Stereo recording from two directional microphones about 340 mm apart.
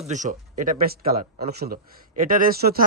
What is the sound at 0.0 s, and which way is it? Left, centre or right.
Speech, right.